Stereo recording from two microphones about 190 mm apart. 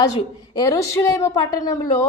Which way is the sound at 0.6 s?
15° left (ahead or behind).